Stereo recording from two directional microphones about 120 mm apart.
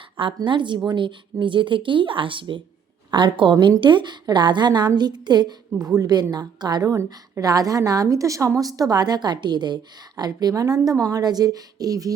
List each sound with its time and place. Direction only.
0.4 s a woman's voice: 40° right (ahead or behind)